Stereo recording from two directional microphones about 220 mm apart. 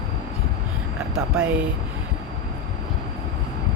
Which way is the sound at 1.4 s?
5° right (ahead or behind).